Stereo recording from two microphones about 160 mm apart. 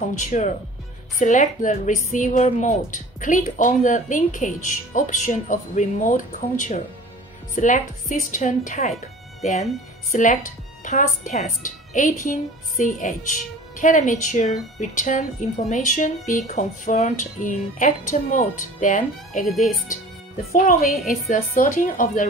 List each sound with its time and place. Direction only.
0.0 s a woman's voice: 50° left (ahead or behind)
20.5 s a woman's voice: 55° left (ahead or behind)